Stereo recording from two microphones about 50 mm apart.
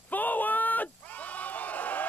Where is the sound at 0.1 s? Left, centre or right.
Left.